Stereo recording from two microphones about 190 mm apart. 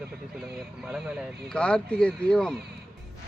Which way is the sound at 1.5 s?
5° left (ahead or behind).